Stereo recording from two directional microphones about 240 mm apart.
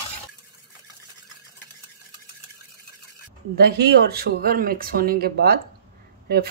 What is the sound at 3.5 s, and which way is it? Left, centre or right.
Speech, right.